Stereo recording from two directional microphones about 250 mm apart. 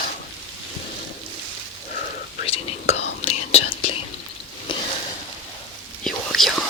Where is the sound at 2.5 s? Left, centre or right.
Left.